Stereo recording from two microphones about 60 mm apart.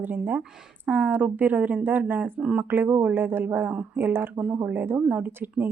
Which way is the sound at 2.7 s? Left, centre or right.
Right.